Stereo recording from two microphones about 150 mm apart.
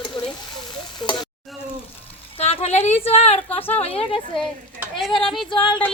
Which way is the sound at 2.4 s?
45° left (ahead or behind).